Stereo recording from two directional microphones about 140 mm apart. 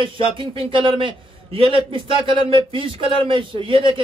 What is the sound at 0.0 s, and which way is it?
A man's voice, 40° right (ahead or behind).